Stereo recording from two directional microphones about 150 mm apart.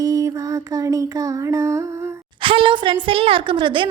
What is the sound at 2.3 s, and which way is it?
A woman's voice, 35° right (ahead or behind).